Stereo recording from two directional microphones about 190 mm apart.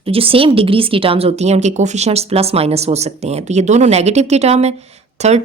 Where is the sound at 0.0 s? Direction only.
30° right (ahead or behind).